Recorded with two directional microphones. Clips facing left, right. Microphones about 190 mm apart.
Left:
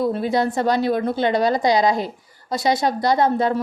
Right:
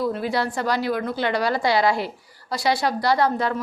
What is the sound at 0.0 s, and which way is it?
A woman's voice, 20° left (ahead or behind).